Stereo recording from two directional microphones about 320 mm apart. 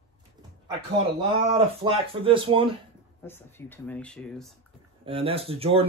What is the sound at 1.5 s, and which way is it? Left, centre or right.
Speech, centre.